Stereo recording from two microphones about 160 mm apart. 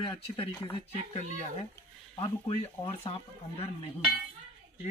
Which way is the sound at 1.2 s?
45° left (ahead or behind).